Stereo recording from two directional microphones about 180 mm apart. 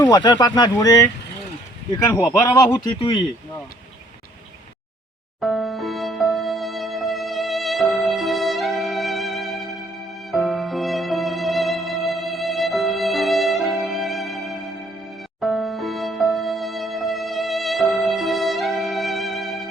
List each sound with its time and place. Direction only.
0.0 s speech: 20° left (ahead or behind)
2.1 s speech: 15° left (ahead or behind)
5.4 s music: centre (ahead or behind)